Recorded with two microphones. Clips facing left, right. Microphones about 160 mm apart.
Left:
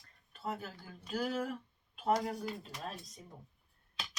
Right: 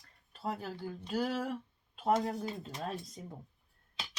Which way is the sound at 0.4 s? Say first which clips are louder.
Right 4 dB; 35° right (ahead or behind).